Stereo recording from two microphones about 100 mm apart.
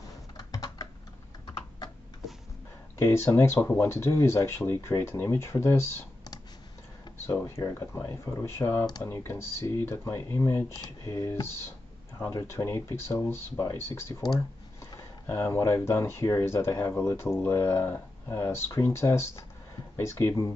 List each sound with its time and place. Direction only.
0.4 s typing: 40° left (ahead or behind)
3.0 s speech: 25° left (ahead or behind)
7.4 s speech: 30° left (ahead or behind)
15.2 s speech: 25° left (ahead or behind)